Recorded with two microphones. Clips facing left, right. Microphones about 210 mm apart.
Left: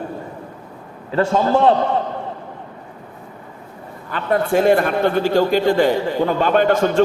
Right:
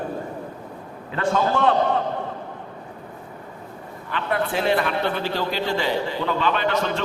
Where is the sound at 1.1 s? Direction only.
35° left (ahead or behind).